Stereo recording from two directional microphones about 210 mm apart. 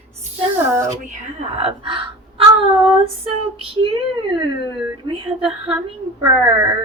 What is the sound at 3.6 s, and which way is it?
Speech, 25° right (ahead or behind).